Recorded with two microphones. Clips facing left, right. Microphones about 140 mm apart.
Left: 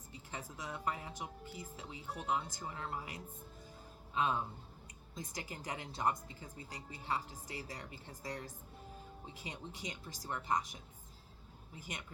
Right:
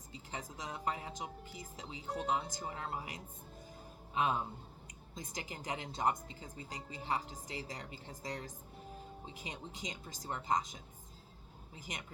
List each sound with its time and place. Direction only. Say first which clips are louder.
0.1 s a woman's voice: right 2 dB; 20° right (ahead or behind)